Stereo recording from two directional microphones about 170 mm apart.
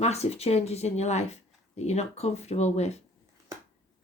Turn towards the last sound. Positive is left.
turn(degrees=40)  # may be behind; listen again after turning